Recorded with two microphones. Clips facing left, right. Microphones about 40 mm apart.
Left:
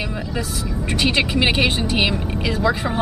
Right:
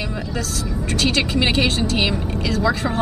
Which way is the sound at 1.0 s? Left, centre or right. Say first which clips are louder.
Left 1 dB; centre.